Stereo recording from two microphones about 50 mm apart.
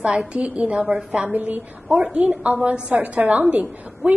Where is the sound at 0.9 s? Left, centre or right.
Centre.